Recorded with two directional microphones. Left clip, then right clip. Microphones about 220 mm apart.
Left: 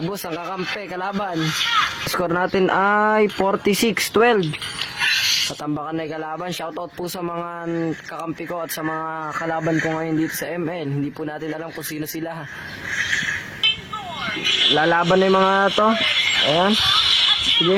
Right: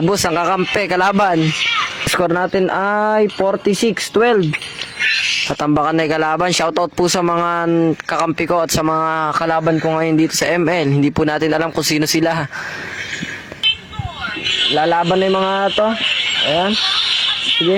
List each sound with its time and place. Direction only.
0.1 s a man's voice: 35° right (ahead or behind)
2.1 s speech: 25° right (ahead or behind)
5.6 s a man's voice: 35° right (ahead or behind)
14.4 s a sound: 15° left (ahead or behind)
14.8 s speech: 15° right (ahead or behind)
15.9 s a sound: 15° left (ahead or behind)